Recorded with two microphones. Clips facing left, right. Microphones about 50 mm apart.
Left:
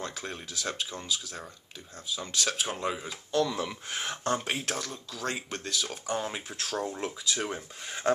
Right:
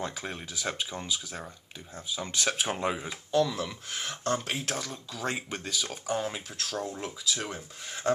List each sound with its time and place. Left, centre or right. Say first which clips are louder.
0.0 s speech: right 2 dB; centre
2.5 s speech: right 2 dB; centre
2.8 s speech: right 2 dB; centre
3.3 s speech: right 1 dB; centre